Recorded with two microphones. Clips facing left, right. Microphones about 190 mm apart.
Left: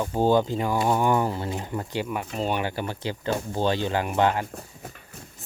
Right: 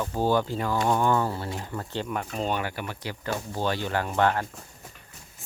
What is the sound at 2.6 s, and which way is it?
Speech, 30° left (ahead or behind).